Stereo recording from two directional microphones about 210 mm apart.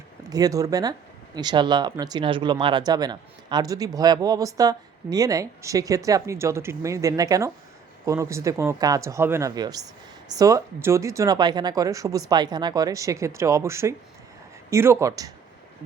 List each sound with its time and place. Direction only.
0.3 s speech: 15° right (ahead or behind)